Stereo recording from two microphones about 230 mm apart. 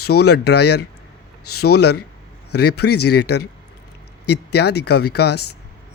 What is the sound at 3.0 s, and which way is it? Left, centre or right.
Speech, left.